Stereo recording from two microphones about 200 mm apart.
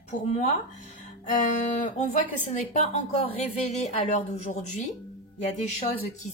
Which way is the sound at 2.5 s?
35° left (ahead or behind).